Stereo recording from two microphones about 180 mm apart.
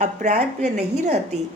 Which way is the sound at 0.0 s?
40° right (ahead or behind).